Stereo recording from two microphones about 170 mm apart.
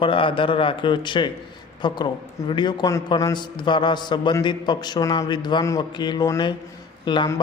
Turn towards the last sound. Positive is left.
turn(degrees=25)  # may be behind; listen again after turning